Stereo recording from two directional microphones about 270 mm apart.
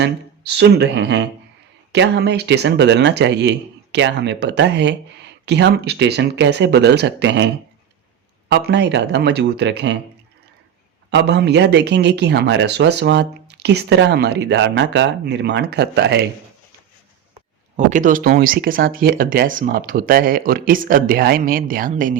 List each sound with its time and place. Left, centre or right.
0.0 s speech: right
11.1 s speech: right
17.7 s speech: right